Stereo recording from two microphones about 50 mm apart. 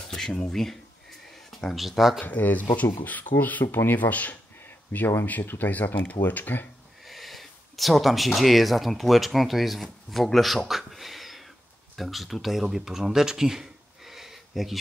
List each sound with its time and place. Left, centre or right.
0.1 s speech: centre
2.2 s speech: left
3.7 s speech: left
4.0 s speech: left
7.1 s speech: centre